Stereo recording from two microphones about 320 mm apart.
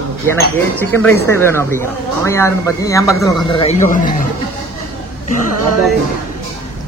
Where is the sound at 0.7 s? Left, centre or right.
Centre; by 4.1 s left.